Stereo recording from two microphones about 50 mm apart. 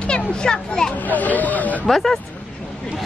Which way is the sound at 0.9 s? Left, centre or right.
Left.